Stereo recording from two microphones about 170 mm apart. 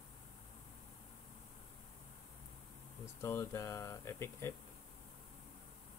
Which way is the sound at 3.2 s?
15° left (ahead or behind).